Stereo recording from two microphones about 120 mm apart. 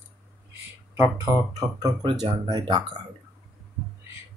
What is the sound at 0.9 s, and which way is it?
Speech, 25° right (ahead or behind).